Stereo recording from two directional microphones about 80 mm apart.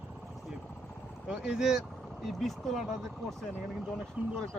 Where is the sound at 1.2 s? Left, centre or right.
Centre.